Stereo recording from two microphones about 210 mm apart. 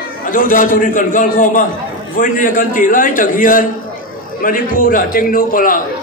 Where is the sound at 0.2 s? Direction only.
40° left (ahead or behind).